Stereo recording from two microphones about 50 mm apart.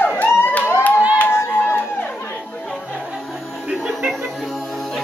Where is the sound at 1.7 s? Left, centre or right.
Left.